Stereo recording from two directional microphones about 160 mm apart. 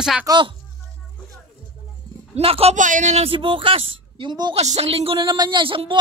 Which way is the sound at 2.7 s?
50° right (ahead or behind).